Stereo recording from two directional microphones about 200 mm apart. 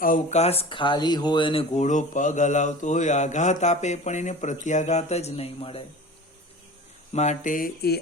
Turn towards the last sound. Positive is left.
turn(degrees=50)  # may be behind; listen again after turning